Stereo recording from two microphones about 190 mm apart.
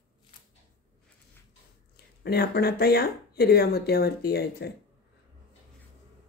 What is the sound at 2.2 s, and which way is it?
Speech, 55° left (ahead or behind).